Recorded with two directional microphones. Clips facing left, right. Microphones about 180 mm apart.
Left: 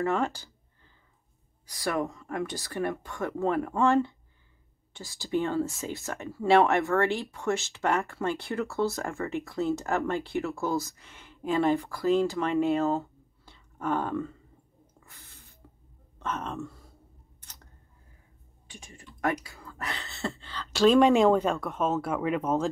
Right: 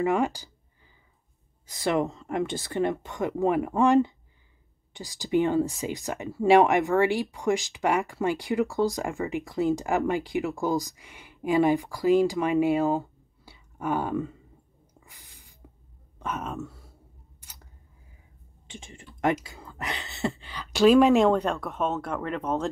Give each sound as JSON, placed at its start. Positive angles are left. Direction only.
{"t": 0.0, "sound": "speech", "side_deg": -15}
{"t": 1.7, "sound": "speech", "side_deg": -20}
{"t": 13.5, "sound": "a sound", "side_deg": -10}
{"t": 15.0, "sound": "sneeze", "side_deg": -15}
{"t": 15.6, "sound": "a sound", "side_deg": -15}
{"t": 16.2, "sound": "speech", "side_deg": -10}
{"t": 18.7, "sound": "speech", "side_deg": -25}